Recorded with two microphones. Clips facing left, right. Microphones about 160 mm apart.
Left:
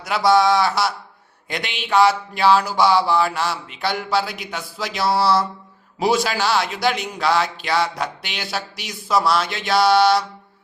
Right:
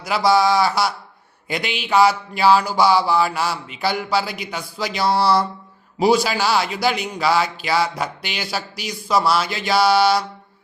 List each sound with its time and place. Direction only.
0.0 s speech: centre (ahead or behind)